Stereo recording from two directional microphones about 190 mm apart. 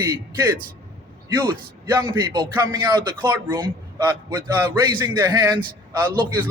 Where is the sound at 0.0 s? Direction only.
15° right (ahead or behind).